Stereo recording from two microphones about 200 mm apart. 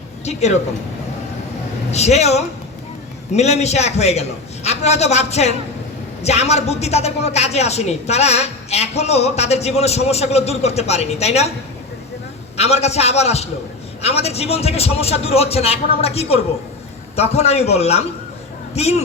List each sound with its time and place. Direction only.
0.3 s a woman's voice: 35° left (ahead or behind)
1.9 s a woman's voice: 35° left (ahead or behind)
12.5 s a woman's voice: 30° left (ahead or behind)